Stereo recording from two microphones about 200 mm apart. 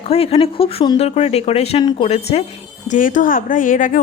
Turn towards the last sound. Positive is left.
turn(degrees=40)  # may be behind; listen again after turning